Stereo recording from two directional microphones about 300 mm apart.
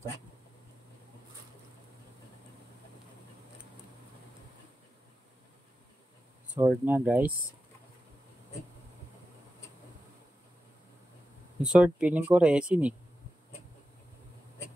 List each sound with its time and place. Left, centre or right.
6.5 s speech: centre
11.6 s speech: centre